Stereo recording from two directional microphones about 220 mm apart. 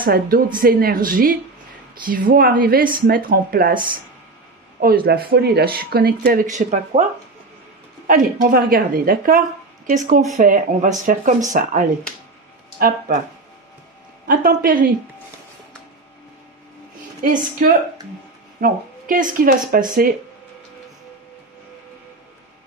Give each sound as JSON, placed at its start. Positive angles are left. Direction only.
{"t": 0.0, "sound": "speech", "side_deg": -40}
{"t": 8.1, "sound": "speech", "side_deg": -40}
{"t": 14.2, "sound": "speech", "side_deg": -40}
{"t": 17.2, "sound": "speech", "side_deg": -40}